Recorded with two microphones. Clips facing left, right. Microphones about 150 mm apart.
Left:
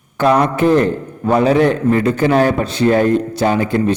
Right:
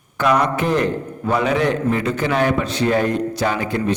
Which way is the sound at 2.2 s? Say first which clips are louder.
Left 5 dB; 35° left (ahead or behind).